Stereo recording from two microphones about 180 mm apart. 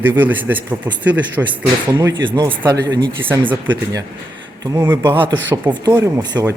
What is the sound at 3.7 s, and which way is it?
Speech, 20° right (ahead or behind).